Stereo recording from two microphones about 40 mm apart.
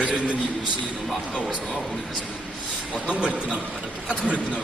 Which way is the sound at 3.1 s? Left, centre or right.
Right.